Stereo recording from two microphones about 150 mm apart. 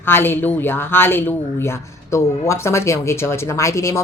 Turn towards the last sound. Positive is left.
turn(degrees=20)  # may be behind; listen again after turning